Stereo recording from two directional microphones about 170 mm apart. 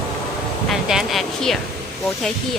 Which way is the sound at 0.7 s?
Centre (ahead or behind).